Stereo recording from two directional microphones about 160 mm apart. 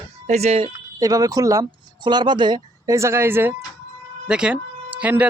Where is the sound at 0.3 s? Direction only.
40° right (ahead or behind).